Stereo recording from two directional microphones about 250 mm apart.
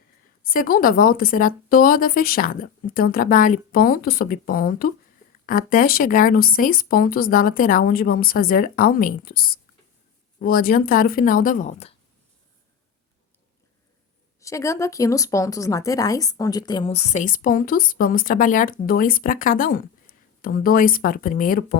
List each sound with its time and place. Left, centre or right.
0.4 s speech: left
14.4 s speech: centre; by 21.8 s left